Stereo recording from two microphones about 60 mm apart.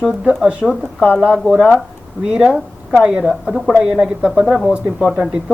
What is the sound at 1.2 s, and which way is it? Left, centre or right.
Speech, centre.